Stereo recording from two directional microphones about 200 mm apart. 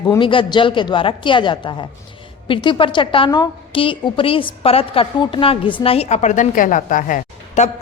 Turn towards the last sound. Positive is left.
turn(degrees=40)  # may be behind; listen again after turning